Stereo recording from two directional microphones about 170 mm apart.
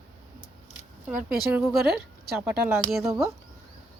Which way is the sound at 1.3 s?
5° right (ahead or behind).